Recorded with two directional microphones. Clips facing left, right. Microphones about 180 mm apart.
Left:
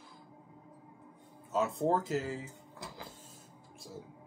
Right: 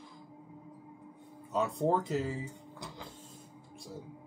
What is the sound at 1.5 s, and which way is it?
Speech, centre (ahead or behind).